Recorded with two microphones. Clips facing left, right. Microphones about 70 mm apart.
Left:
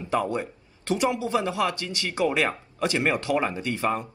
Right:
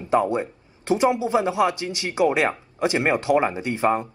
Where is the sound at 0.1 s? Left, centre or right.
Right.